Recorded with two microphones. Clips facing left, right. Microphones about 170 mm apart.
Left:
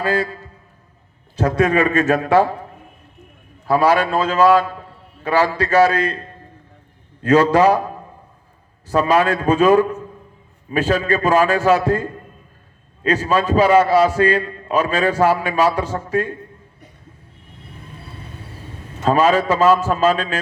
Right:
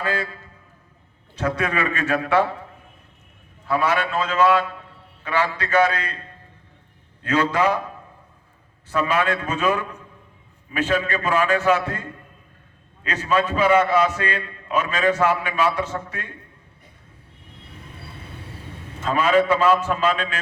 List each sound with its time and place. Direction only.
0.0 s a man's voice: 40° left (ahead or behind)
3.7 s a man's voice: 35° left (ahead or behind)
19.0 s a man's voice: 35° left (ahead or behind)